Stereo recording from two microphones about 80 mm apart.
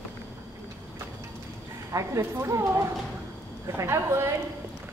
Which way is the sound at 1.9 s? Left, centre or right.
Right.